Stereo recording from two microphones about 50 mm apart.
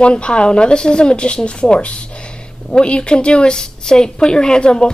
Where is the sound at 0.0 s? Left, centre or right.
Left.